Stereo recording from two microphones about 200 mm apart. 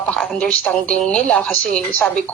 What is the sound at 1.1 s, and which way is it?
Speech, 5° left (ahead or behind).